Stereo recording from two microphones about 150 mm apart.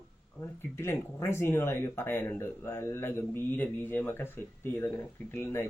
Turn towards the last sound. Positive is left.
turn(degrees=15)  # may be behind; listen again after turning